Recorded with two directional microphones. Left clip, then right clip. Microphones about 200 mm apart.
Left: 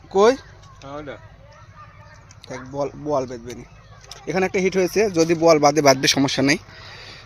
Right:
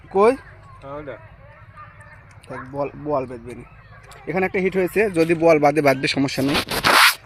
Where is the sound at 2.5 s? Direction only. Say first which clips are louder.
Even; centre (ahead or behind).